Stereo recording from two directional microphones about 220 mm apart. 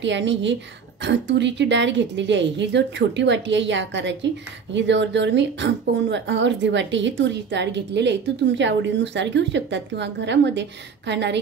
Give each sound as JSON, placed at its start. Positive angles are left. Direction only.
{"t": 0.0, "sound": "a woman's voice", "side_deg": -55}